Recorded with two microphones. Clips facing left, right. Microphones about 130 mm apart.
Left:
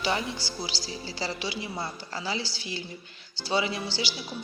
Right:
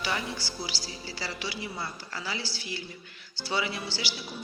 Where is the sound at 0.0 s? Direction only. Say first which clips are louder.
Left 3 dB; 20° left (ahead or behind).